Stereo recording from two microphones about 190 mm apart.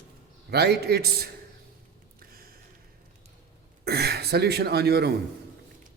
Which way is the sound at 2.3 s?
50° right (ahead or behind).